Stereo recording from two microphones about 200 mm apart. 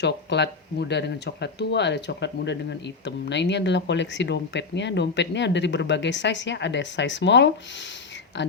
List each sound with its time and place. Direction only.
0.0 s speech: 60° left (ahead or behind)